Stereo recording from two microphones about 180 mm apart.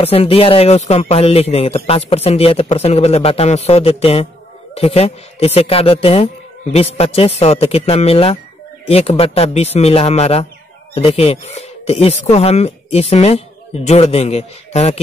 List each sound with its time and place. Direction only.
0.0 s speech: 35° left (ahead or behind)